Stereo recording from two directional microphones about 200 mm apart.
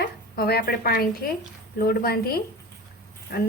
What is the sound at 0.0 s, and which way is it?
A woman's voice, 50° left (ahead or behind).